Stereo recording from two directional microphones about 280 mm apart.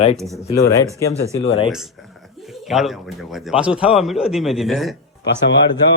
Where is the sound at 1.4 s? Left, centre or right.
Left.